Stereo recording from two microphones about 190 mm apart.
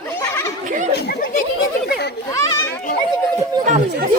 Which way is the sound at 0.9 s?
50° left (ahead or behind).